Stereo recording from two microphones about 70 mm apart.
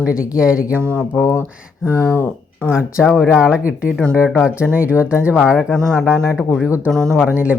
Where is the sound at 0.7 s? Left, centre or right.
Right.